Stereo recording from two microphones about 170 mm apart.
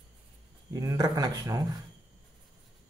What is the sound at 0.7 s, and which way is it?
Speech, 20° right (ahead or behind).